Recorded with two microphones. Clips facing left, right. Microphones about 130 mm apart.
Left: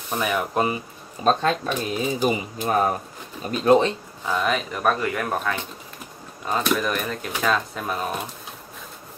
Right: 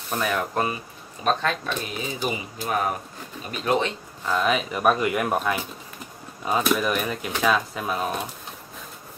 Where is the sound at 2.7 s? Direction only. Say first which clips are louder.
Left 4 dB; 30° left (ahead or behind).